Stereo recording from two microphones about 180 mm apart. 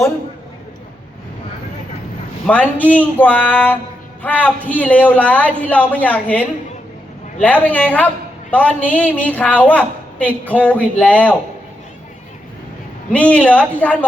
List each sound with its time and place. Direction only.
2.5 s a man's voice: 10° left (ahead or behind)
13.1 s a man's voice: 10° left (ahead or behind)